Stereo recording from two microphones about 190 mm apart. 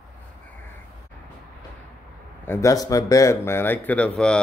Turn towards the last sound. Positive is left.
turn(degrees=5)  # may be behind; listen again after turning